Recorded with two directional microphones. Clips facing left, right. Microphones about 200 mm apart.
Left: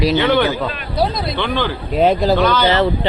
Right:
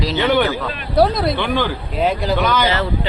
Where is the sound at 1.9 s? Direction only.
40° left (ahead or behind).